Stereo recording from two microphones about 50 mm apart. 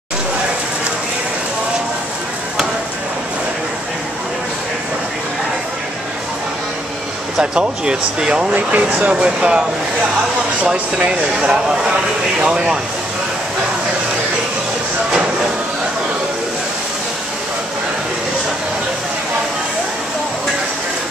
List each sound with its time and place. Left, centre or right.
7.5 s speech: centre
8.5 s speech: right
9.1 s speech: centre